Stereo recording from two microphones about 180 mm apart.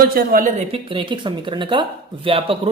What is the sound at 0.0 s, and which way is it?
Speech, 55° right (ahead or behind).